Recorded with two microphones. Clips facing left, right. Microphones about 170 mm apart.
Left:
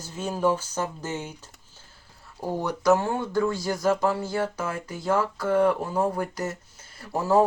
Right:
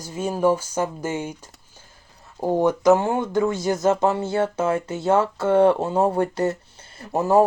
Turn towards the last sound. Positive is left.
turn(degrees=-20)  # may be behind; listen again after turning